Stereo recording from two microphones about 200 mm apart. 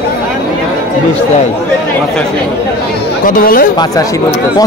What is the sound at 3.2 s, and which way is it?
Speech, 45° left (ahead or behind).